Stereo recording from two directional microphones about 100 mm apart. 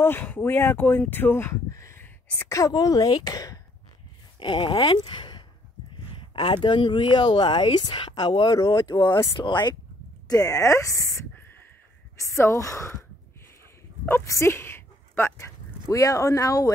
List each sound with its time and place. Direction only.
0.0 s speech: 20° left (ahead or behind); by 3.5 s 40° left (ahead or behind)
4.4 s speech: 55° left (ahead or behind)
10.2 s speech: 35° left (ahead or behind)
14.0 s speech: 25° left (ahead or behind)